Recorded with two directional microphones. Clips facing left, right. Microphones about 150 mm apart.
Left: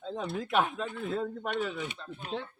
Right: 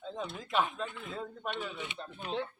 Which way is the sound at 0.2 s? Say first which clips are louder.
Left 3 dB; 65° left (ahead or behind).